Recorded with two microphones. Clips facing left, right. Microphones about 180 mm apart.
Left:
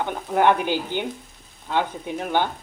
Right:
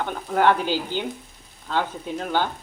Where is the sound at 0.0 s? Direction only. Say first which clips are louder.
Left 1 dB; 15° left (ahead or behind).